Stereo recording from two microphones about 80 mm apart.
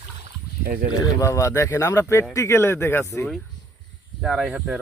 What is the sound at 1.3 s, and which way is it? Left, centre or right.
Speech, left.